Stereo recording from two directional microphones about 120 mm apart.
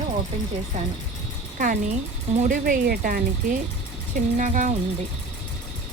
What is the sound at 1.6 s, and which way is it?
Music, 90° right.